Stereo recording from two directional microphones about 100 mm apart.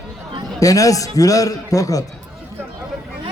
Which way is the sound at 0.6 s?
35° left (ahead or behind).